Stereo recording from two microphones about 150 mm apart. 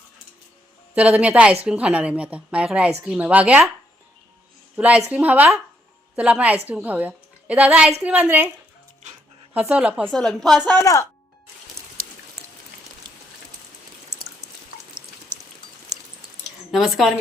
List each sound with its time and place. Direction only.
0.9 s a woman's voice: 10° right (ahead or behind)
4.8 s a woman's voice: 5° right (ahead or behind)
9.6 s a woman's voice: 10° right (ahead or behind)
10.1 s a woman's voice: centre (ahead or behind)
11.8 s raindrop: 20° right (ahead or behind)
16.7 s a woman's voice: centre (ahead or behind)